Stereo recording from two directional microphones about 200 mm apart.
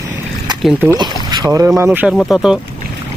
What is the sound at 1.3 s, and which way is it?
Speech, 15° right (ahead or behind).